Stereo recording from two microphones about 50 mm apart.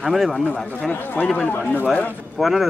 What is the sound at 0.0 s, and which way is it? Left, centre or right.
Speech, centre.